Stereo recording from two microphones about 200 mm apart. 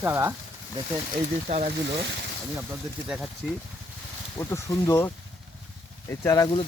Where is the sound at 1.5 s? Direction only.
35° right (ahead or behind).